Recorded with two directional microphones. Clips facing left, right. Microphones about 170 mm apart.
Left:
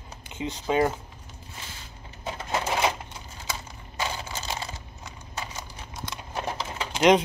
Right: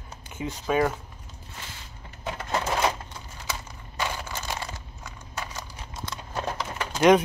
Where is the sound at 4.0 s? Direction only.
25° left (ahead or behind).